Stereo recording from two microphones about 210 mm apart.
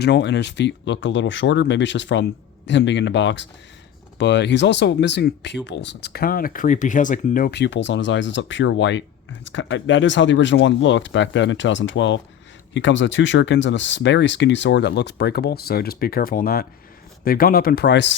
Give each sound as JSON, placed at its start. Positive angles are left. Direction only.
{"t": 0.0, "sound": "speech", "side_deg": 55}